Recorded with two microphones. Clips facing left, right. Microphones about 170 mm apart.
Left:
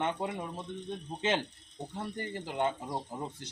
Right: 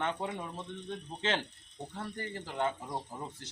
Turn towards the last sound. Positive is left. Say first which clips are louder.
# left 3 dB
turn(degrees=20)  # may be behind; listen again after turning